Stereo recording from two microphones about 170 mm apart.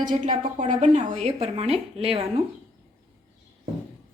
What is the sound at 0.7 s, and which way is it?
A woman's voice, 45° right (ahead or behind).